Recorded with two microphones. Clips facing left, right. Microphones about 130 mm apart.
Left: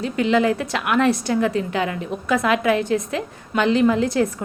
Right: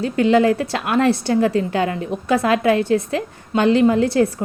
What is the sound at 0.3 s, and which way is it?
A woman's voice, 30° right (ahead or behind).